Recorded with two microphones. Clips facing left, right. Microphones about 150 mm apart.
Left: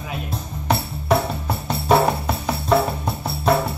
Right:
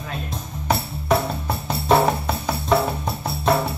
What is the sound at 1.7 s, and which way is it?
Music, centre (ahead or behind).